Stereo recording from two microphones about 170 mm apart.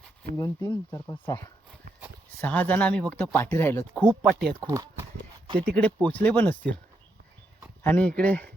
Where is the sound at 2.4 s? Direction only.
10° left (ahead or behind).